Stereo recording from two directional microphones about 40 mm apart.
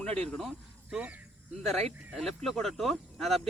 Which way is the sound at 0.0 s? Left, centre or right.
Left.